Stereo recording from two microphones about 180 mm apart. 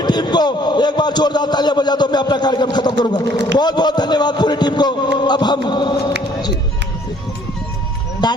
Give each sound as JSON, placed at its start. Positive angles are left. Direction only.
{"t": 0.0, "sound": "a man's voice", "side_deg": 25}
{"t": 8.2, "sound": "a man's voice", "side_deg": 25}